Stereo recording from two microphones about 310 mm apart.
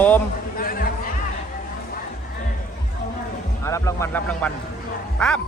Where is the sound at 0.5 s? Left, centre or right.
Left.